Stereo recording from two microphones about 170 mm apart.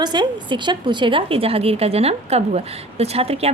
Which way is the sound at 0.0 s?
25° right (ahead or behind).